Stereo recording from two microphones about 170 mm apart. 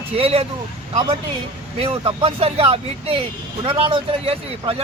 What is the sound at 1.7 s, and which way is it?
Speech, 35° right (ahead or behind).